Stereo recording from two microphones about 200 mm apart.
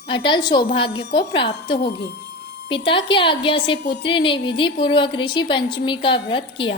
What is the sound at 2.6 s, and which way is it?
A woman's voice, 25° left (ahead or behind).